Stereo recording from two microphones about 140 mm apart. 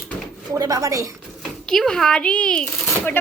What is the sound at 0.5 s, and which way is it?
Speech, 25° right (ahead or behind).